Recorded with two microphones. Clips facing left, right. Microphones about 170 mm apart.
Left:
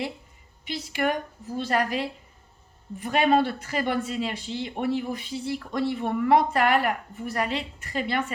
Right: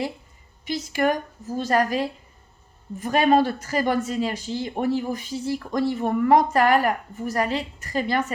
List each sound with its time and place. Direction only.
0.6 s a woman's voice: 45° right (ahead or behind)